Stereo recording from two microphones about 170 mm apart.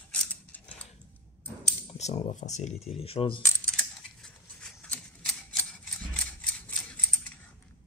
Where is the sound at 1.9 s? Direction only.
40° left (ahead or behind).